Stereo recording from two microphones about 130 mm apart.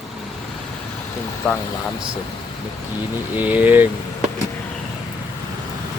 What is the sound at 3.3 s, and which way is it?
Speech, 15° right (ahead or behind).